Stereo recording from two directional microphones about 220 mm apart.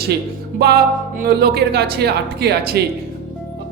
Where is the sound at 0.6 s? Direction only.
45° right (ahead or behind).